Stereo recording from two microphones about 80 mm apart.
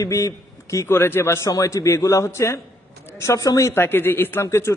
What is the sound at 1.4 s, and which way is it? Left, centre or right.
A man's voice, left.